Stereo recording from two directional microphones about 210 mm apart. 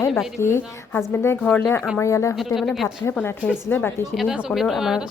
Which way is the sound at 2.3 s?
Centre (ahead or behind).